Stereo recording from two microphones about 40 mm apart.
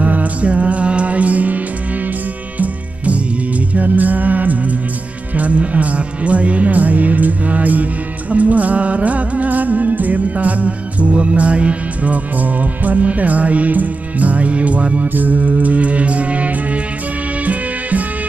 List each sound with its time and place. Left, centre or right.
0.0 s music: right
2.6 s music: right
15.1 s music: right